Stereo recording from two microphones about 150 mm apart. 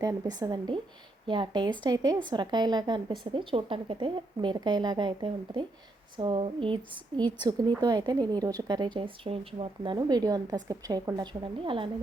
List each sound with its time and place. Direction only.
0.0 s a woman's voice: 25° right (ahead or behind)